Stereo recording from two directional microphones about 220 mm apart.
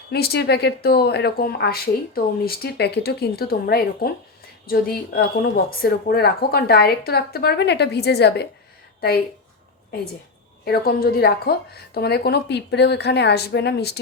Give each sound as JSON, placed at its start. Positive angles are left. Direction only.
{"t": 0.1, "sound": "speech", "side_deg": 45}
{"t": 10.7, "sound": "speech", "side_deg": 45}